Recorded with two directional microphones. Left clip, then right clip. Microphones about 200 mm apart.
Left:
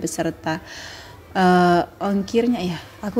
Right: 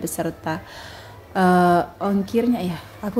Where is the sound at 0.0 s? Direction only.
10° left (ahead or behind).